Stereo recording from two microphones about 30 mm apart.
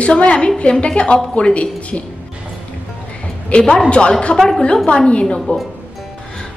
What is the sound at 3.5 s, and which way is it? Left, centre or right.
Speech, left.